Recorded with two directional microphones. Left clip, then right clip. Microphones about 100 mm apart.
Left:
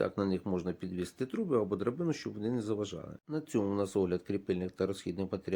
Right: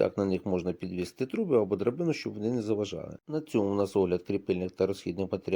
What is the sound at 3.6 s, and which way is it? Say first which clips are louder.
Speech: right 5 dB; 20° right (ahead or behind).